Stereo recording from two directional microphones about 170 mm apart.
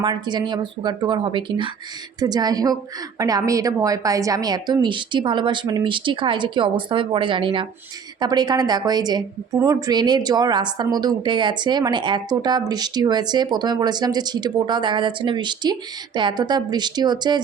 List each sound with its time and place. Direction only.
0.0 s a woman's voice: 25° right (ahead or behind)